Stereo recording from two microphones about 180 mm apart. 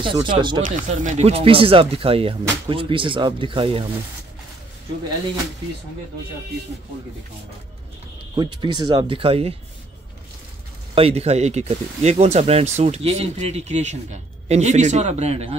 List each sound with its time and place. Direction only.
0.0 s speech: 25° right (ahead or behind)
0.7 s speech: 45° right (ahead or behind); by 3.8 s 30° right (ahead or behind)
8.4 s speech: 25° right (ahead or behind)
11.0 s speech: 35° right (ahead or behind)